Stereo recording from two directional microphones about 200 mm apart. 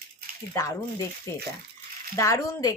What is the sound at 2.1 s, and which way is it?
Speech, 15° left (ahead or behind).